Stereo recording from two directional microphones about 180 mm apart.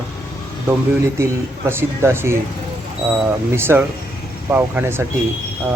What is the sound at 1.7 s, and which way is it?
Speech, 15° right (ahead or behind).